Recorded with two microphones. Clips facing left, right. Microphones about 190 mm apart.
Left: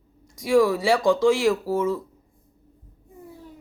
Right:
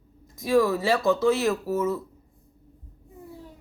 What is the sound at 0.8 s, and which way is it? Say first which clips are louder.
Speech: left 3 dB; 90° left.